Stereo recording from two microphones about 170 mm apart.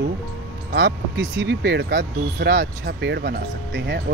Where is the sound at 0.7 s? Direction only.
90° right.